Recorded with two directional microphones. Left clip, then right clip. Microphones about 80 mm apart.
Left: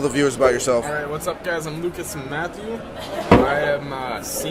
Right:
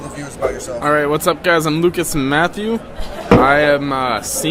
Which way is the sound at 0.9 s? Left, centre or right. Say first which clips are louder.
Right 10 dB; right.